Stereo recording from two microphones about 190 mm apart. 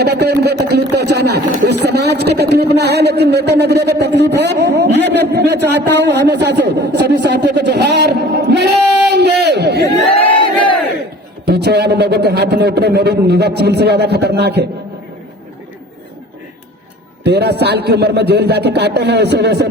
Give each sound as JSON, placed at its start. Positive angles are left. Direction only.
{"t": 0.0, "sound": "speech", "side_deg": -60}
{"t": 11.4, "sound": "speech", "side_deg": -60}
{"t": 17.2, "sound": "speech", "side_deg": -60}